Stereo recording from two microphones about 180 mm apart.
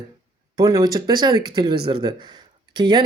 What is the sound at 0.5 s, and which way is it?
Speech, 20° right (ahead or behind).